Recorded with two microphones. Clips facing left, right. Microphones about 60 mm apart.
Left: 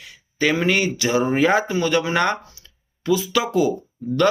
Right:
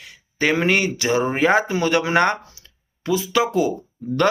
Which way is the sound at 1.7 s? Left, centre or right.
Right.